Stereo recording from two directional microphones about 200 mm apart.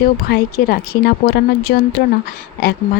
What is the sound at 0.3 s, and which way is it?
Speech, 50° left (ahead or behind).